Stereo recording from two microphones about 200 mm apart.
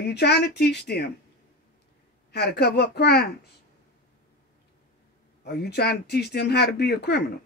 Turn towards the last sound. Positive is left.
turn(degrees=55)  # may be behind; listen again after turning